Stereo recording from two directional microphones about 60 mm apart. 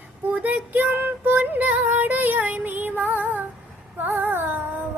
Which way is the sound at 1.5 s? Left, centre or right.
Right.